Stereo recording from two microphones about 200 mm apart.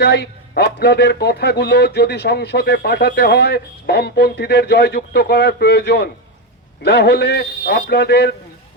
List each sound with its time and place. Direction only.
0.0 s a man's voice: 55° left (ahead or behind)